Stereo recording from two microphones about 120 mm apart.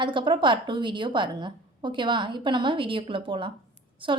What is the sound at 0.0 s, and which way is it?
A woman's voice, 40° right (ahead or behind).